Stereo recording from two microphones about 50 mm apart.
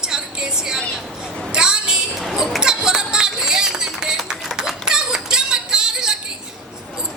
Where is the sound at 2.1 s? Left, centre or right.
Centre.